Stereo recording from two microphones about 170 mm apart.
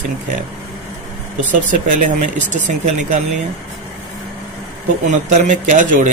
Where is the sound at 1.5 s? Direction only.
50° right (ahead or behind).